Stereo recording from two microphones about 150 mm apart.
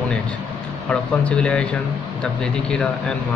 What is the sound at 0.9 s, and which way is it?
A man's voice, 5° left (ahead or behind).